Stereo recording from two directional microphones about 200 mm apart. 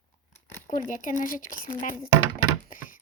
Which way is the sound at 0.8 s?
40° left (ahead or behind).